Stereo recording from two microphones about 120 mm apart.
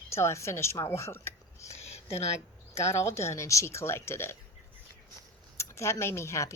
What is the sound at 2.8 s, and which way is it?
Speech, 25° left (ahead or behind).